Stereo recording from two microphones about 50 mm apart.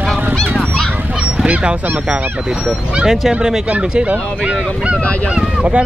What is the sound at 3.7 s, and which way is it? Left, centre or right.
Speech, right.